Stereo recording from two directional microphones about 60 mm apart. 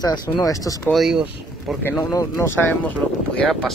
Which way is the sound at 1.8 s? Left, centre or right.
Left.